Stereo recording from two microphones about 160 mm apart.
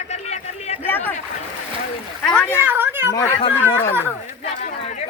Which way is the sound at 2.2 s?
5° left (ahead or behind).